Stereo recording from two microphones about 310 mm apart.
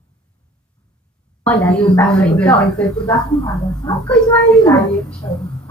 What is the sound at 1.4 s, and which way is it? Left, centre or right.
A woman's voice, centre.